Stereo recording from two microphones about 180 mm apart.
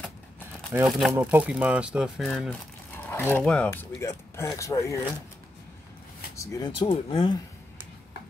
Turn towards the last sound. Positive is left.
turn(degrees=25)  # may be behind; listen again after turning